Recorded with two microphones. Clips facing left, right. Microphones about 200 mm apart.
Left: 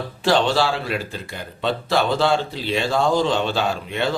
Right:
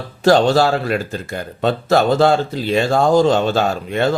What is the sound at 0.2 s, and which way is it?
Speech, 45° right (ahead or behind).